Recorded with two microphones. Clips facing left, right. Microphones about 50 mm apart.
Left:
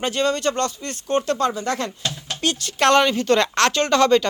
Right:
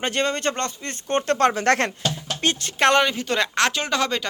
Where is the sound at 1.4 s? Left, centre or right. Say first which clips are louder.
Right 4 dB; right.